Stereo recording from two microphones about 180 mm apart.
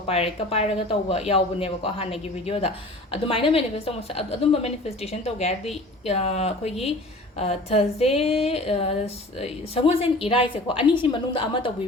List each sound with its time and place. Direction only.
0.1 s a woman's voice: 35° left (ahead or behind)